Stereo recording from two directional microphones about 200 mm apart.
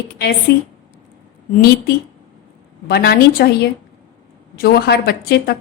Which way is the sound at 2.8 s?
55° left (ahead or behind).